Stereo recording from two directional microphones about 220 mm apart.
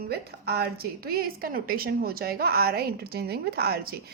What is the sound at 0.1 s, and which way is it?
A woman's voice, 45° right (ahead or behind).